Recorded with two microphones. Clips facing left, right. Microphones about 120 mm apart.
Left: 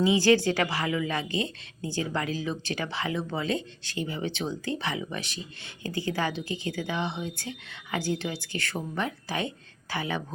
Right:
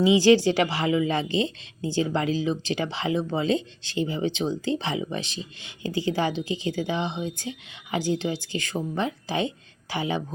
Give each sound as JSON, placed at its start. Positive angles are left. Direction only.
{"t": 0.0, "sound": "a woman's voice", "side_deg": -20}